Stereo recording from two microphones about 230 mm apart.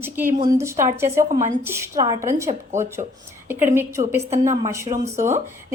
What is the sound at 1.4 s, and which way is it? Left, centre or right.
A woman's voice, centre.